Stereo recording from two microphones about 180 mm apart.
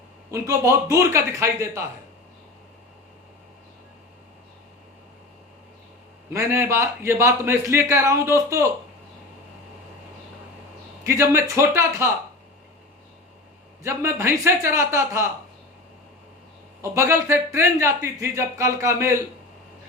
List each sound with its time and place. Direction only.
0.3 s a man's voice: 15° right (ahead or behind)
6.3 s a man's voice: 15° right (ahead or behind)
11.0 s a man's voice: 15° right (ahead or behind)
13.8 s a man's voice: 15° right (ahead or behind)
16.9 s a man's voice: 15° right (ahead or behind)